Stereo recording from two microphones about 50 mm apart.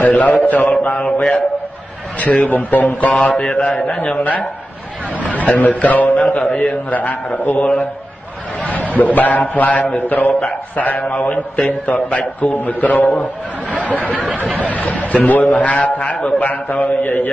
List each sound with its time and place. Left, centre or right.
0.0 s a man's voice: left
2.5 s a man's voice: left
3.1 s a man's voice: left
8.9 s a man's voice: left